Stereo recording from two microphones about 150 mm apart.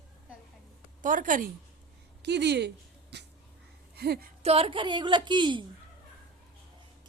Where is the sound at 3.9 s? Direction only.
90° right.